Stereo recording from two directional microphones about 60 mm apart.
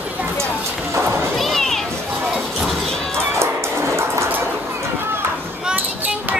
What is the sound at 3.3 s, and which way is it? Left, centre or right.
Music, right.